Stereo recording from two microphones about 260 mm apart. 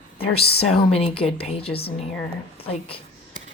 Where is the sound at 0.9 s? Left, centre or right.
Left.